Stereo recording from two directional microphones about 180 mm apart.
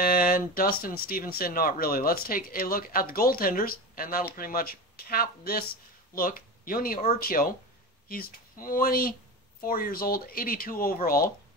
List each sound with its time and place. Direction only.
0.0 s speech: 55° left (ahead or behind)